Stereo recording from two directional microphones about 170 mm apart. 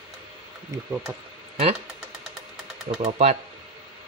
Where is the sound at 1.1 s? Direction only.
15° right (ahead or behind).